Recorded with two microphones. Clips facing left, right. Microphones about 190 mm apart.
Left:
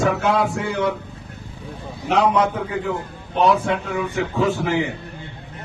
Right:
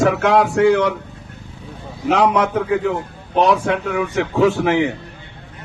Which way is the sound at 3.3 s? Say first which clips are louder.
Right 2 dB; 75° right (ahead or behind).